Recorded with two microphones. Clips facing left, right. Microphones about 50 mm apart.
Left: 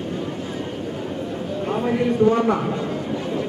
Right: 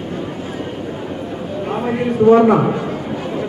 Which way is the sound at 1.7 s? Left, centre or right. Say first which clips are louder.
Right 1 dB; right.